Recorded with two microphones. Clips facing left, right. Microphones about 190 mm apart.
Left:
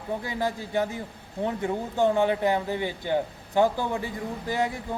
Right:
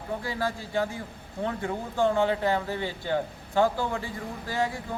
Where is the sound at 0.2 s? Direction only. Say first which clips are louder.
Left 2 dB; 20° left (ahead or behind).